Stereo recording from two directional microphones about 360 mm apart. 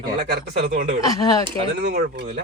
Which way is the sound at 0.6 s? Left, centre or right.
Right.